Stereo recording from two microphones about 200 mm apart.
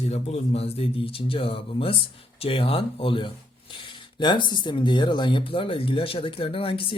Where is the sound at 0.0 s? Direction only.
30° left (ahead or behind).